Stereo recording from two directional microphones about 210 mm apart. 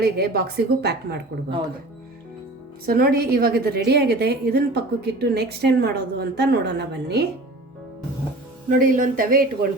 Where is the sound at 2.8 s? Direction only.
45° right (ahead or behind).